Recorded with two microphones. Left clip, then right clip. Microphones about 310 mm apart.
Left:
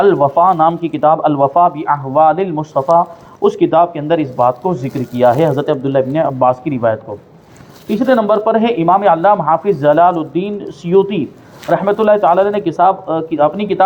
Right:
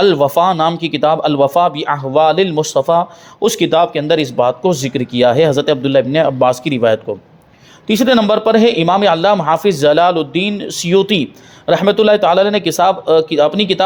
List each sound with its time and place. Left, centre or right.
0.0 s a man's voice: right